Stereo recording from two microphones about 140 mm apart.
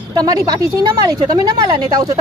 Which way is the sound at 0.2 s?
25° right (ahead or behind).